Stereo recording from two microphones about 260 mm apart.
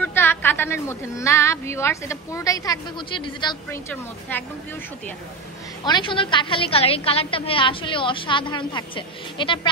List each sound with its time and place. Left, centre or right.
0.0 s a woman's voice: centre
5.9 s a woman's voice: centre